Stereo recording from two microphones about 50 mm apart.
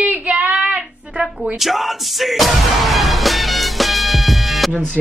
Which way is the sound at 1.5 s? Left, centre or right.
Centre.